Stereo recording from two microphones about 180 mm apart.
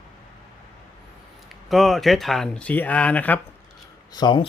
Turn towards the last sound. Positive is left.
turn(degrees=25)  # may be behind; listen again after turning